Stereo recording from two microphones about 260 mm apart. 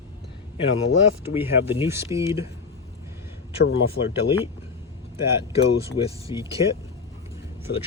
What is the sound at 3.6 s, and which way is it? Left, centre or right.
Speech, left.